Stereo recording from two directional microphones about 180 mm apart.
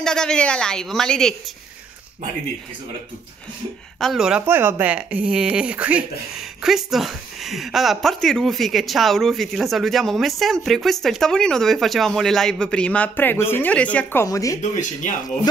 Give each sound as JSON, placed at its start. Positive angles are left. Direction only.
{"t": 0.0, "sound": "a woman's voice", "side_deg": 5}
{"t": 4.0, "sound": "a woman's voice", "side_deg": 0}
{"t": 14.6, "sound": "speech", "side_deg": 45}